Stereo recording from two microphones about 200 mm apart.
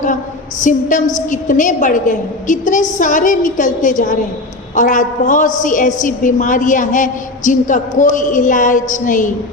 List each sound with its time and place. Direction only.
0.6 s a woman's voice: 40° left (ahead or behind)